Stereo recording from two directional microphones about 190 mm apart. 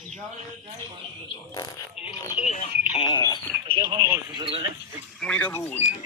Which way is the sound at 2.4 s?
35° left (ahead or behind).